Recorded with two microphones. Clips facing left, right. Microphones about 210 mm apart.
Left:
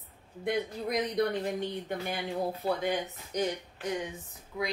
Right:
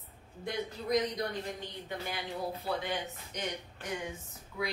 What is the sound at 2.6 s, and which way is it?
Speech, 40° left (ahead or behind).